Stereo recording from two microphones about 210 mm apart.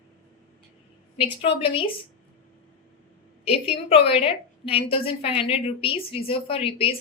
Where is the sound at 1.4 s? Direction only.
25° left (ahead or behind).